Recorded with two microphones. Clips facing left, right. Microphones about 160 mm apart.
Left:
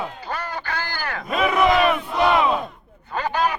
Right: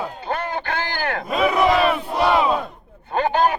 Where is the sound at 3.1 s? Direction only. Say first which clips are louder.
Right 4 dB; 25° right (ahead or behind).